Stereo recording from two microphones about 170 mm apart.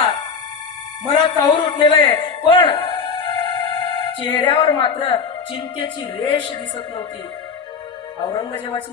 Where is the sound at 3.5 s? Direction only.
30° left (ahead or behind).